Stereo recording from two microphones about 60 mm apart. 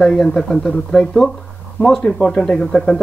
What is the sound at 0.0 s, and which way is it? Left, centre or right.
Speech, centre.